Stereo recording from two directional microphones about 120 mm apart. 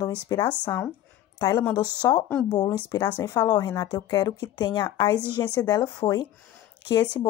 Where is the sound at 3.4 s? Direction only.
30° left (ahead or behind).